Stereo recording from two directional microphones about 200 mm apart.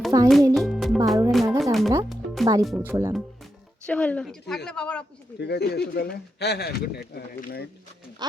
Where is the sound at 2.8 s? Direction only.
10° right (ahead or behind).